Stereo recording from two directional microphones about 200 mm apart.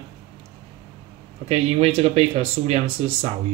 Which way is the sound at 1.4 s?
30° right (ahead or behind).